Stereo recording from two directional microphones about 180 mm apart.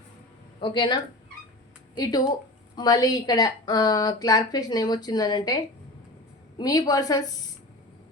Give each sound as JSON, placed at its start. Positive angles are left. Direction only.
{"t": 0.6, "sound": "a woman's voice", "side_deg": 25}